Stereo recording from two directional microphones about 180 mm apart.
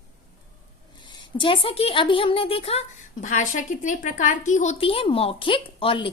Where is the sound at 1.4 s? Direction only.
30° left (ahead or behind).